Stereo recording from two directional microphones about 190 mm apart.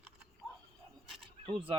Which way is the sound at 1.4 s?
25° right (ahead or behind).